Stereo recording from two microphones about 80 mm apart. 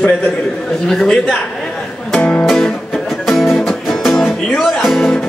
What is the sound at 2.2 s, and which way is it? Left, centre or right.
Music, centre.